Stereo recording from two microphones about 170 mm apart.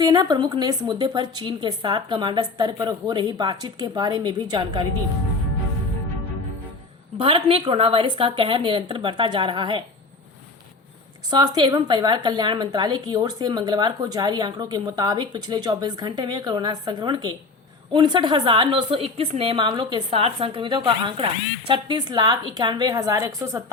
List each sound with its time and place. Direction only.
0.0 s a woman's voice: 25° right (ahead or behind)
7.2 s a woman's voice: 35° right (ahead or behind)
11.3 s a woman's voice: 25° right (ahead or behind)